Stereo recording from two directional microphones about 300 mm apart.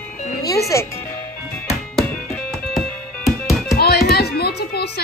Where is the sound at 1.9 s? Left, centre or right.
Centre.